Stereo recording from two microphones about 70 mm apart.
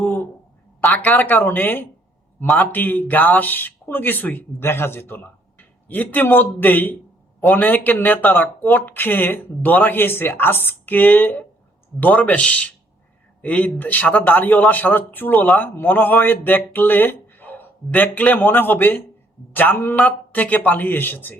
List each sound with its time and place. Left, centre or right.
0.9 s speech: left